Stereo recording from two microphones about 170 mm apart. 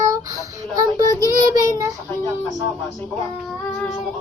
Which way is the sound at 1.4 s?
20° right (ahead or behind).